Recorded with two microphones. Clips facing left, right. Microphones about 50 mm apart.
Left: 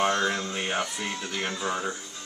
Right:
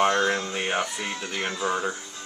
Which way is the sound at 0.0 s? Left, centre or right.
Centre.